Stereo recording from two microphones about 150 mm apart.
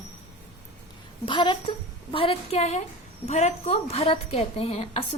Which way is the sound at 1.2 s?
35° left (ahead or behind).